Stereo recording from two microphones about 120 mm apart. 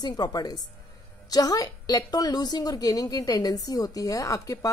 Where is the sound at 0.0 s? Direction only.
35° left (ahead or behind).